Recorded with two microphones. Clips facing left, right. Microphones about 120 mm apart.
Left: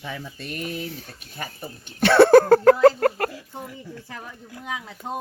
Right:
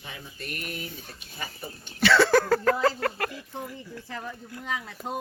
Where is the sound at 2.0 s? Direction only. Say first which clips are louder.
Left 8 dB; 55° left (ahead or behind).